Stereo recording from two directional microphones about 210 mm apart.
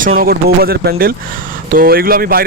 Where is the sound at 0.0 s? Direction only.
40° right (ahead or behind).